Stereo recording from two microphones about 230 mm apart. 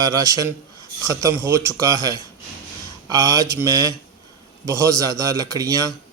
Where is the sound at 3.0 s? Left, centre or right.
Centre.